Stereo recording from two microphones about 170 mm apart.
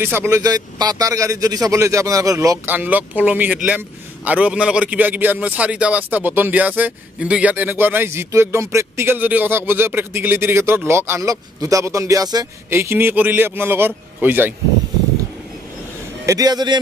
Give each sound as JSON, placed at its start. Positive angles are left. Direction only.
{"t": 0.0, "sound": "speech", "side_deg": -15}
{"t": 16.3, "sound": "a man's voice", "side_deg": -20}